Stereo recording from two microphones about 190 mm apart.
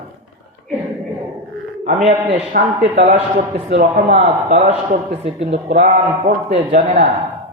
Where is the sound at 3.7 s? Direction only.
35° right (ahead or behind).